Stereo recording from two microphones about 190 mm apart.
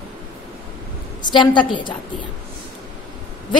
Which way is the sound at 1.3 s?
25° left (ahead or behind).